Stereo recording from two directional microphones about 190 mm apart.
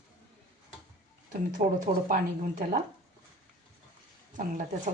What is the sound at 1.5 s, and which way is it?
Speech, 45° right (ahead or behind).